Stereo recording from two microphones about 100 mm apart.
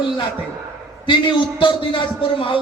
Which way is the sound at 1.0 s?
55° left (ahead or behind).